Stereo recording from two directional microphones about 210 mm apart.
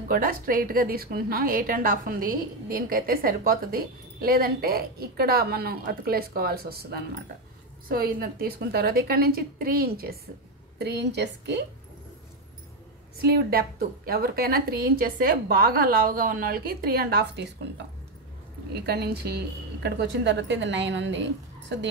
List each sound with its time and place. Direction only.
0.1 s a woman's voice: 45° right (ahead or behind)
13.2 s a woman's voice: 45° right (ahead or behind)
18.7 s a woman's voice: 50° right (ahead or behind)